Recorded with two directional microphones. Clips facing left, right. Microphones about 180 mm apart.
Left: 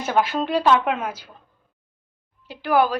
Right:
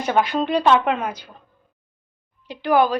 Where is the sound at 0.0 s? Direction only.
5° left (ahead or behind).